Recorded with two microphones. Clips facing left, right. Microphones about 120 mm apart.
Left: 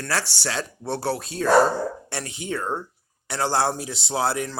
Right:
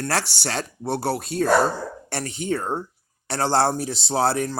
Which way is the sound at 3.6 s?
55° right (ahead or behind).